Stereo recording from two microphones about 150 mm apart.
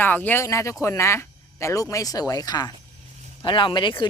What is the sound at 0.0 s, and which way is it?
Speech, 10° left (ahead or behind).